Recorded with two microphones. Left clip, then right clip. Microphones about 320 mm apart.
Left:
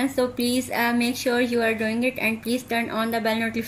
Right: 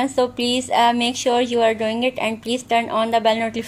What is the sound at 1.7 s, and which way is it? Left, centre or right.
Speech, right.